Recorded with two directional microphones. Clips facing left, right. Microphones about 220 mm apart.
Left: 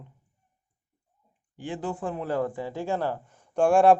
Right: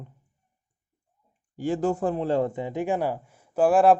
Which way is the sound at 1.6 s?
45° right (ahead or behind).